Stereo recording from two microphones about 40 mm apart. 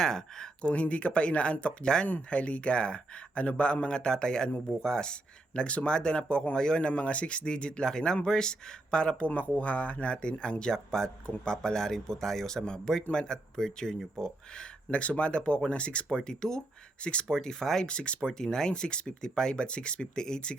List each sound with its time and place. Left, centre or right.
0.0 s a man's voice: centre
0.7 s speech: left
2.3 s a man's voice: left; by 14.7 s centre
14.8 s speech: left; by 16.6 s centre
17.0 s speech: left
17.2 s a man's voice: centre
17.9 s speech: left